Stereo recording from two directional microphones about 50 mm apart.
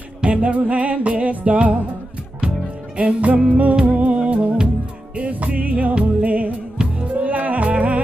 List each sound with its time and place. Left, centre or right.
0.2 s music: right
3.0 s music: right